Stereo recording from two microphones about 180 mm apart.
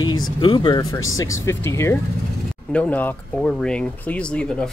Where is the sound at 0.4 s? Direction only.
30° left (ahead or behind).